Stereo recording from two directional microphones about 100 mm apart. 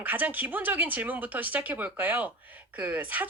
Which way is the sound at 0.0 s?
15° right (ahead or behind).